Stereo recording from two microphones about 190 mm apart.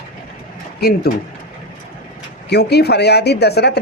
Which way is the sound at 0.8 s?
55° left (ahead or behind).